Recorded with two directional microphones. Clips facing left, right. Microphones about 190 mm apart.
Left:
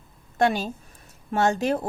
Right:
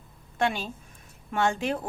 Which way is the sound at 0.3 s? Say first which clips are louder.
Left 5 dB; 40° left (ahead or behind).